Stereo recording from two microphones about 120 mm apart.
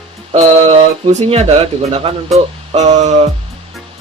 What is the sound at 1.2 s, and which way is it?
Speech, 55° right (ahead or behind).